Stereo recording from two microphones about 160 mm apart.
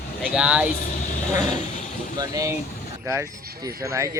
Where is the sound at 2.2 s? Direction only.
20° right (ahead or behind).